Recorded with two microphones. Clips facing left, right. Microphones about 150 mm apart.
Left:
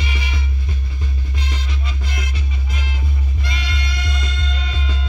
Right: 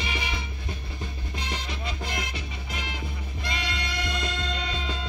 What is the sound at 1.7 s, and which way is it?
Music, 55° right (ahead or behind).